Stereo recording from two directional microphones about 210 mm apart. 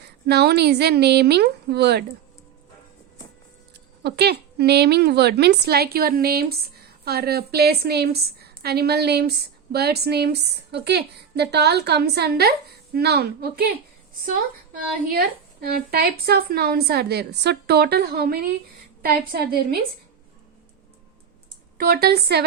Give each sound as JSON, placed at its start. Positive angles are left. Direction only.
{"t": 0.0, "sound": "a woman's voice", "side_deg": -50}
{"t": 4.0, "sound": "a woman's voice", "side_deg": -50}
{"t": 15.6, "sound": "a woman's voice", "side_deg": -50}
{"t": 21.8, "sound": "a woman's voice", "side_deg": -45}